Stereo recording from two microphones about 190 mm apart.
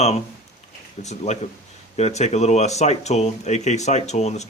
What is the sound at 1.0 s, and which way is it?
Speech, 35° left (ahead or behind).